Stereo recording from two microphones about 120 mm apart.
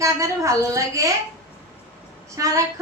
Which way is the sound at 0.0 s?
25° right (ahead or behind).